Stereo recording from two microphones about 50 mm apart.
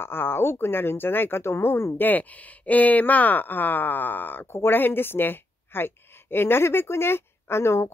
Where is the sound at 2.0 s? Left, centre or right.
Left.